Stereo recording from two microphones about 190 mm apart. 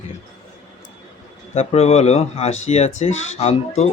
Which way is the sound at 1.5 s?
30° left (ahead or behind).